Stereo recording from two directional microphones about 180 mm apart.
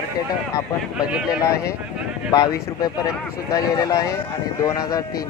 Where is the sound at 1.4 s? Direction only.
20° left (ahead or behind).